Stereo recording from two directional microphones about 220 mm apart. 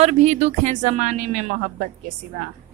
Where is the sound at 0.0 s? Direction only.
30° right (ahead or behind).